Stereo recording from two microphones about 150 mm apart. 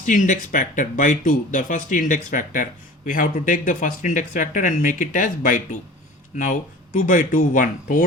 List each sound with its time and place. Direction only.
0.0 s speech: 60° left (ahead or behind)